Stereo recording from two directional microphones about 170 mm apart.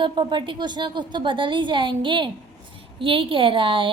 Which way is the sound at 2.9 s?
30° right (ahead or behind).